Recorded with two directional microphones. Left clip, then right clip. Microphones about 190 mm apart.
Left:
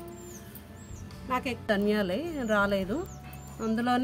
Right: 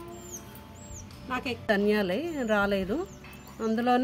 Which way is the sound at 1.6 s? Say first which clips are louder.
Right 3 dB; 10° right (ahead or behind).